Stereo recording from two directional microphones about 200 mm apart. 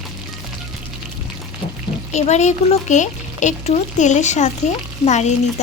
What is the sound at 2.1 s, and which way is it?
A child's voice, 35° left (ahead or behind).